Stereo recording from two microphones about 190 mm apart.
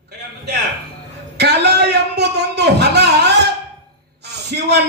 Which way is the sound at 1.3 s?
60° right (ahead or behind).